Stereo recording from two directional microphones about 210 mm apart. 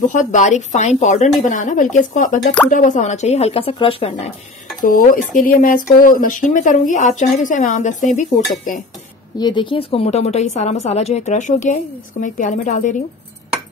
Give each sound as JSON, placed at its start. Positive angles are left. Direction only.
{"t": 0.0, "sound": "a woman's voice", "side_deg": 35}
{"t": 4.8, "sound": "a woman's voice", "side_deg": 40}
{"t": 9.4, "sound": "a woman's voice", "side_deg": 20}